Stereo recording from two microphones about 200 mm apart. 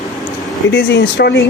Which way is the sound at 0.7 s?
55° left (ahead or behind).